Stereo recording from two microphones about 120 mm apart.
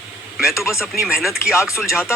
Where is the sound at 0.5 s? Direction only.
25° left (ahead or behind).